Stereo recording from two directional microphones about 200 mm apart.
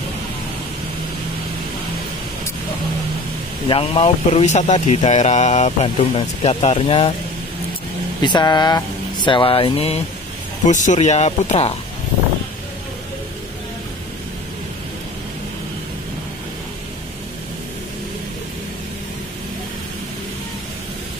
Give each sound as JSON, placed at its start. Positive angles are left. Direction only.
{"t": 3.6, "sound": "speech", "side_deg": 25}
{"t": 8.2, "sound": "speech", "side_deg": 20}